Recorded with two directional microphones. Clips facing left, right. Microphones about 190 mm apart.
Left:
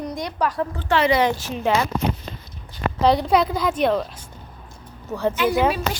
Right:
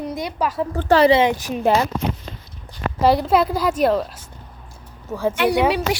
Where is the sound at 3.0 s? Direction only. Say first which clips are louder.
Right 1 dB; centre (ahead or behind).